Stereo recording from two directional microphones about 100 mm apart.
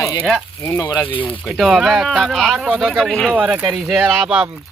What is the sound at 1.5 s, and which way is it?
Speech, centre (ahead or behind).